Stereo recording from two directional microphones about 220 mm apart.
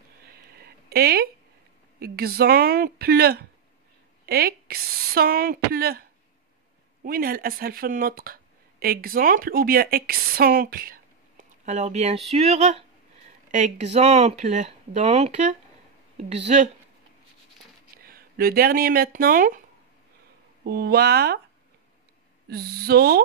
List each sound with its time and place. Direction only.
0.8 s a sound: 45° right (ahead or behind)
2.0 s speech: 45° right (ahead or behind)
7.1 s speech: 40° right (ahead or behind)
17.9 s speech: 40° right (ahead or behind)
20.6 s speech: 45° right (ahead or behind)
22.5 s speech: 45° right (ahead or behind)